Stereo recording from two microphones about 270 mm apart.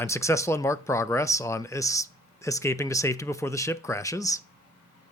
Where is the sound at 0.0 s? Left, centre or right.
Centre.